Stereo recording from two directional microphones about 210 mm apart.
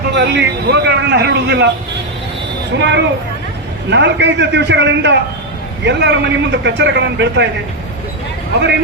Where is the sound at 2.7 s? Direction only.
55° right (ahead or behind).